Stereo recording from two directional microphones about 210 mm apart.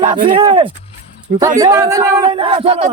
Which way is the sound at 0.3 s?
25° right (ahead or behind).